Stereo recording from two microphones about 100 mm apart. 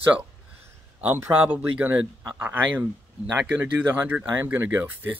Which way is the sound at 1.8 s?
20° right (ahead or behind).